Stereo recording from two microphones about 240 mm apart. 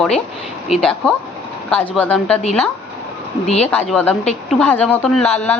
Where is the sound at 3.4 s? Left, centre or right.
Left.